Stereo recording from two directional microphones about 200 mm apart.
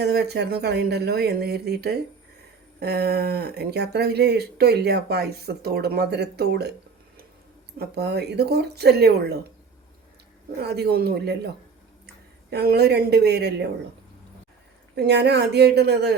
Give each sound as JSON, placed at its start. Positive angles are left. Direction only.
{"t": 0.0, "sound": "speech", "side_deg": -55}
{"t": 7.8, "sound": "speech", "side_deg": -55}
{"t": 10.6, "sound": "speech", "side_deg": -55}
{"t": 12.5, "sound": "speech", "side_deg": -55}
{"t": 14.9, "sound": "speech", "side_deg": -55}